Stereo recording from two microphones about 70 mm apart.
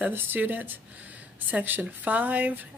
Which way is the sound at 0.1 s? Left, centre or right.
Right.